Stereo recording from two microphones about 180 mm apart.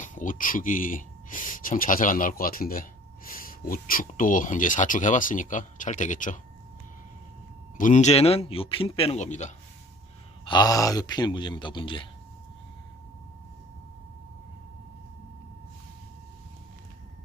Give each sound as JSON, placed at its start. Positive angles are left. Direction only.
{"t": 0.0, "sound": "speech", "side_deg": 45}
{"t": 7.8, "sound": "a man's voice", "side_deg": 45}
{"t": 10.4, "sound": "a man's voice", "side_deg": 25}